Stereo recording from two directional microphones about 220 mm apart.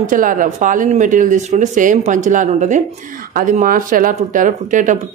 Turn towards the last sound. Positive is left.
turn(degrees=-35)  # may be behind; listen again after turning